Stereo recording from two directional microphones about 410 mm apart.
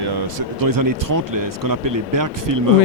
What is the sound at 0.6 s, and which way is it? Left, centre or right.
Speech, right.